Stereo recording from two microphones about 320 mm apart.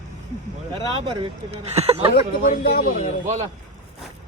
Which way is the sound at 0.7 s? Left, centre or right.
Centre.